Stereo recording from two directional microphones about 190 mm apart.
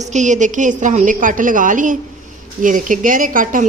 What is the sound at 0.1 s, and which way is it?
A woman's voice, 40° right (ahead or behind).